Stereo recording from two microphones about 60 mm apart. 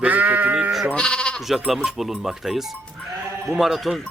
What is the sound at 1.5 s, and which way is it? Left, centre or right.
Speech, centre.